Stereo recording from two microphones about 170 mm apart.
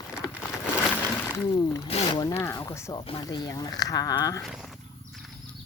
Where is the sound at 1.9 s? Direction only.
25° left (ahead or behind).